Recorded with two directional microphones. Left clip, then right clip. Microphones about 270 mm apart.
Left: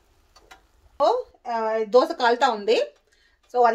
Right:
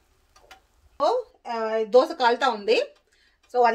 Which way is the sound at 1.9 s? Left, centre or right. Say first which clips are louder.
Even; left.